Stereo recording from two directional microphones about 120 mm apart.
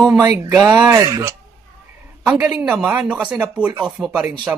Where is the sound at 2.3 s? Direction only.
10° right (ahead or behind).